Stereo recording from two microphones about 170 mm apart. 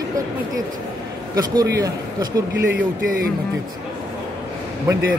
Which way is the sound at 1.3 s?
20° right (ahead or behind).